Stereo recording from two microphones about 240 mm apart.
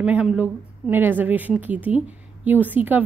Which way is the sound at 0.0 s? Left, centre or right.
Centre.